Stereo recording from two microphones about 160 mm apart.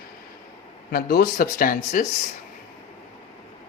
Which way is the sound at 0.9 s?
75° left (ahead or behind).